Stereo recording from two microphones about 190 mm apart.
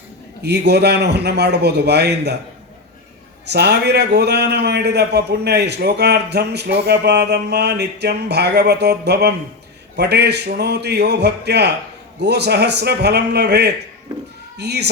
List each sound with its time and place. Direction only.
0.4 s a man's voice: 60° right (ahead or behind)
3.5 s a man's voice: 60° right (ahead or behind)